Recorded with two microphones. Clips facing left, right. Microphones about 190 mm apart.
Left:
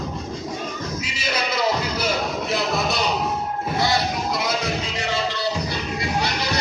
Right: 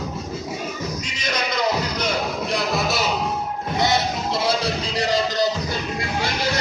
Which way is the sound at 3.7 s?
20° right (ahead or behind).